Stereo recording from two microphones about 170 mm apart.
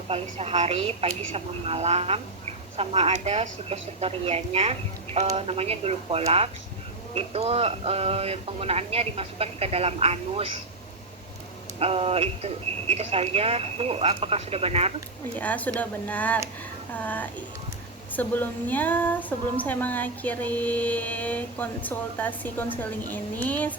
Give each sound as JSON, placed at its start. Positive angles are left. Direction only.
{"t": 0.1, "sound": "speech", "side_deg": -35}
{"t": 11.8, "sound": "speech", "side_deg": -35}
{"t": 15.4, "sound": "speech", "side_deg": 10}